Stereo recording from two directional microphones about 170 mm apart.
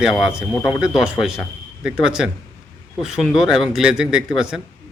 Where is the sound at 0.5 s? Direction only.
15° left (ahead or behind).